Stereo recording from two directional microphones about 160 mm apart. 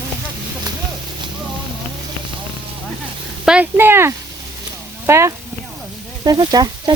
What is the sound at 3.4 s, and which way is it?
Speech, 10° right (ahead or behind).